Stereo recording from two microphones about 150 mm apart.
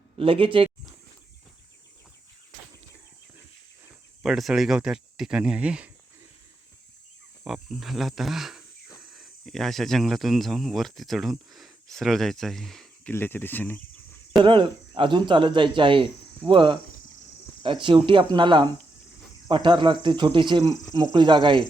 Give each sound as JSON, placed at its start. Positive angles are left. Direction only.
{"t": 0.2, "sound": "speech", "side_deg": -35}
{"t": 4.2, "sound": "speech", "side_deg": 0}
{"t": 7.4, "sound": "speech", "side_deg": -5}
{"t": 13.1, "sound": "speech", "side_deg": 15}
{"t": 14.4, "sound": "speech", "side_deg": -35}